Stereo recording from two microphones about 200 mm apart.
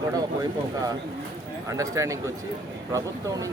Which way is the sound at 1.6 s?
15° right (ahead or behind).